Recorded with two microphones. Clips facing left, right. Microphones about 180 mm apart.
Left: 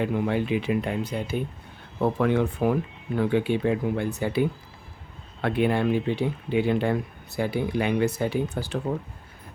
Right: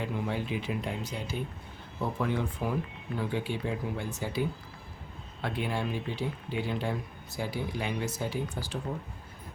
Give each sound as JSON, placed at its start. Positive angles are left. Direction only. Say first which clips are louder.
{"t": 0.0, "sound": "speech", "louder": "left 8 dB", "side_deg": 65}